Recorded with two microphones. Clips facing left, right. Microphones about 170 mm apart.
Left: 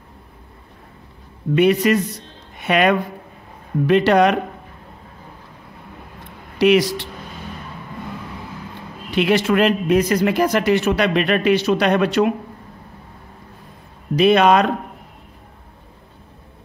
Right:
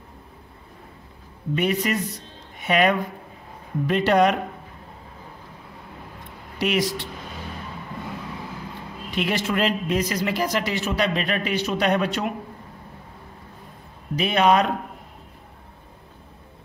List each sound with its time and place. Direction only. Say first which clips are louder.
1.5 s speech: left 8 dB; 80° left
6.6 s a man's voice: left 9 dB; 80° left
9.1 s a man's voice: left 8 dB; 70° left (ahead or behind)
14.1 s speech: left 6 dB; 85° left